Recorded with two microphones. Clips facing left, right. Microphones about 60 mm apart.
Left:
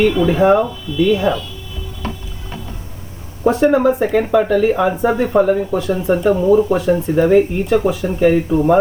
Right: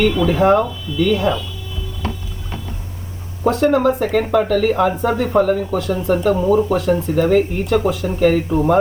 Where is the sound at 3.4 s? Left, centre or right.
Centre.